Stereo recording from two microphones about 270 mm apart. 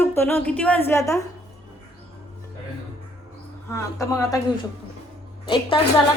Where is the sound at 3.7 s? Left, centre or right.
Centre.